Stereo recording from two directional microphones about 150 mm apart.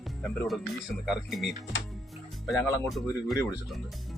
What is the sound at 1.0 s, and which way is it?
Speech, centre (ahead or behind).